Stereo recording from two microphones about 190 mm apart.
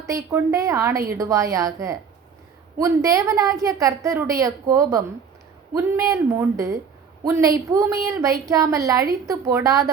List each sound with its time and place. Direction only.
0.0 s a woman's voice: 15° right (ahead or behind)